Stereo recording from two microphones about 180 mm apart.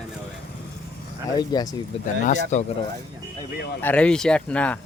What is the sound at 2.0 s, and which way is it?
Speech, 45° left (ahead or behind).